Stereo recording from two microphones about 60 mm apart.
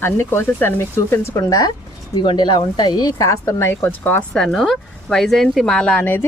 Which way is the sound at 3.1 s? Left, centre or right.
Left.